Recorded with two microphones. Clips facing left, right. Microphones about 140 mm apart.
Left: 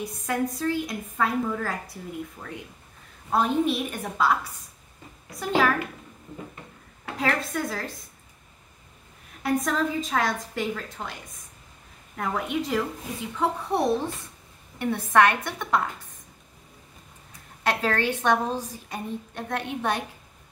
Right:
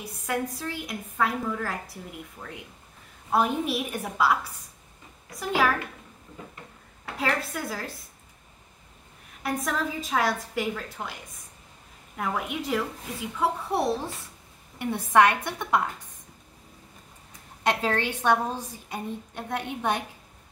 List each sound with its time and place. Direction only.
0.0 s a woman's voice: 5° right (ahead or behind)
3.3 s a woman's voice: 10° right (ahead or behind)
5.4 s a woman's voice: 10° right (ahead or behind)
7.2 s a woman's voice: 5° right (ahead or behind)
9.4 s a woman's voice: 5° right (ahead or behind)
12.2 s a woman's voice: 5° right (ahead or behind)
17.6 s a woman's voice: 15° right (ahead or behind)